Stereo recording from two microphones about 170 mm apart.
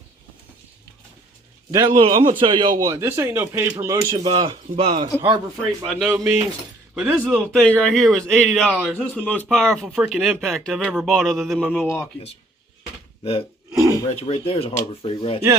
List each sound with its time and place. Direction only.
1.7 s a man's voice: 25° right (ahead or behind)
4.1 s a man's voice: 30° right (ahead or behind)
5.5 s speech: centre (ahead or behind)
9.3 s speech: 5° left (ahead or behind)
13.7 s a sound: 20° right (ahead or behind)
14.2 s speech: 35° left (ahead or behind)